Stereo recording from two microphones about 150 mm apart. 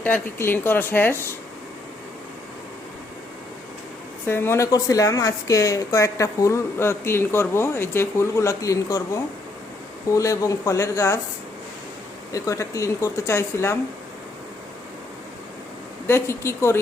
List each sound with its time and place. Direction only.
0.0 s speech: 15° left (ahead or behind)
4.3 s speech: 15° left (ahead or behind)
12.3 s speech: 20° left (ahead or behind)
16.0 s speech: 20° left (ahead or behind)